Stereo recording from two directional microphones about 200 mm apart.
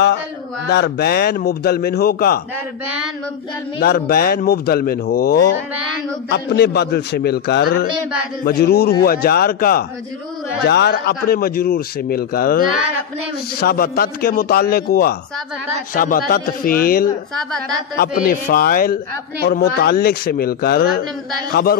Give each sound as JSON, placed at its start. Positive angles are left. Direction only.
{"t": 0.7, "sound": "speech", "side_deg": 55}
{"t": 3.8, "sound": "a man's voice", "side_deg": 50}